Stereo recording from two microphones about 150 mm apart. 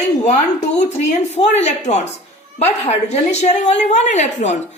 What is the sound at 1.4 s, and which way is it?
A woman's voice, 50° left (ahead or behind).